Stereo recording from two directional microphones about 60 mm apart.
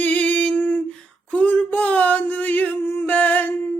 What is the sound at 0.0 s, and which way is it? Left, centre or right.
Female singing, left.